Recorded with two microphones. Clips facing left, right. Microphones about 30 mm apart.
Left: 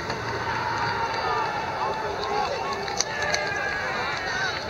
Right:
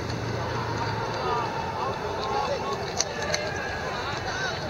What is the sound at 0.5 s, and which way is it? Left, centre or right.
Run, left.